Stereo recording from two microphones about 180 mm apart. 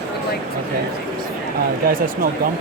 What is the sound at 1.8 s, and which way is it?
Speech, 55° right (ahead or behind).